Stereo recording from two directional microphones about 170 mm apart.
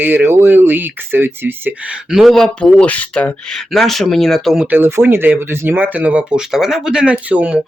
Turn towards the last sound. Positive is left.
turn(degrees=-5)  # may be behind; listen again after turning